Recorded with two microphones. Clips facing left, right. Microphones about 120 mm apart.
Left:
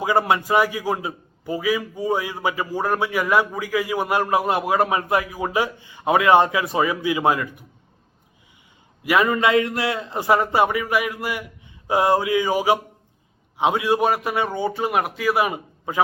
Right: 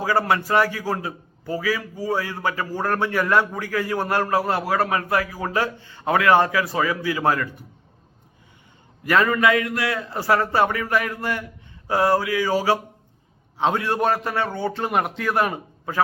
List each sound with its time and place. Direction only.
0.0 s a man's voice: 15° left (ahead or behind)
9.0 s a man's voice: 15° left (ahead or behind)
9.4 s a man's voice: 25° left (ahead or behind); by 16.0 s 10° left (ahead or behind)